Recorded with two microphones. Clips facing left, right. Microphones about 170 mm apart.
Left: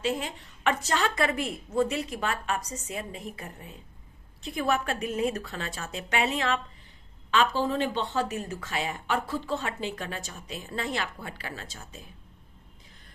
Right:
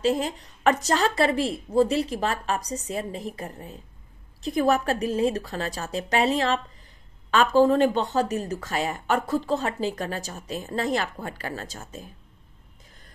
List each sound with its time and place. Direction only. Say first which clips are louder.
0.0 s a woman's voice: right 6 dB; 40° right (ahead or behind)
7.2 s speech: right 7 dB; 45° right (ahead or behind)